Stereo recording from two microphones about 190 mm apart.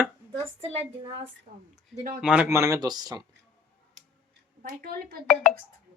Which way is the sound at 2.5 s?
15° right (ahead or behind).